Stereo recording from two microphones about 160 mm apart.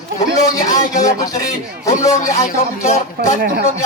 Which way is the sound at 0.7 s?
20° left (ahead or behind).